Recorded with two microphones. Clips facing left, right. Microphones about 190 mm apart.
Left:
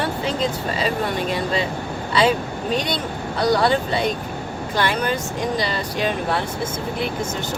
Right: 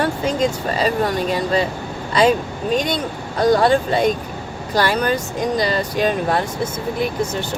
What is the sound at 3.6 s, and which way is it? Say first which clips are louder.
Speech: right 4 dB; 45° right (ahead or behind).